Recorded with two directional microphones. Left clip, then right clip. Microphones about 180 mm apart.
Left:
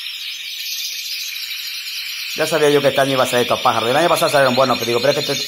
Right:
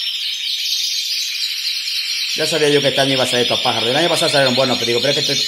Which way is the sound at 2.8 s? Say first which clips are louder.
Even; 10° right (ahead or behind).